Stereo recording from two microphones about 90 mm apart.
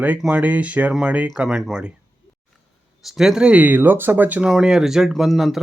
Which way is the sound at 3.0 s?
5° right (ahead or behind).